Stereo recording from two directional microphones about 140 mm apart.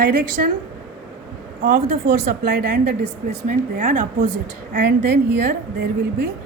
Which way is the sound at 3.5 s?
65° right (ahead or behind).